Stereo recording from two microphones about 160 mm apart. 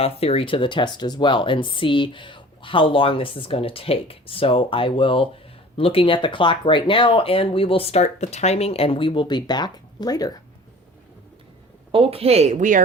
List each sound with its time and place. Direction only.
0.0 s speech: 40° left (ahead or behind)
11.9 s a woman's voice: 35° right (ahead or behind); by 12.8 s 55° right (ahead or behind)